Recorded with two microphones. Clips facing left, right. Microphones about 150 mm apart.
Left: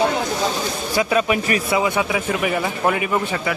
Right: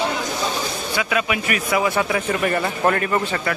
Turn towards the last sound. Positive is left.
turn(degrees=10)  # may be behind; listen again after turning